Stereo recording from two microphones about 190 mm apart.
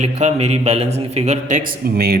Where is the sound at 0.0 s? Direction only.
35° right (ahead or behind).